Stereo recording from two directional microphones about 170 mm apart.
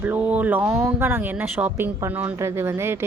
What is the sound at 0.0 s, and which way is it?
Speech, 10° right (ahead or behind).